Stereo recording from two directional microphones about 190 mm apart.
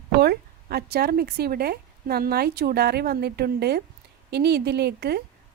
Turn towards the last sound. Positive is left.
turn(degrees=-55)  # may be behind; listen again after turning